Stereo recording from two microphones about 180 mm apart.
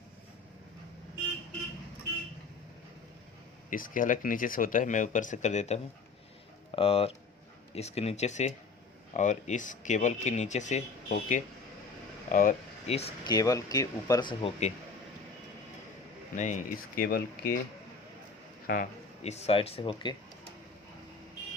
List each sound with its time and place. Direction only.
3.7 s speech: 50° left (ahead or behind)
12.9 s speech: 35° left (ahead or behind)
13.2 s speech: 20° left (ahead or behind)
16.3 s speech: 45° left (ahead or behind)
19.2 s speech: 35° left (ahead or behind)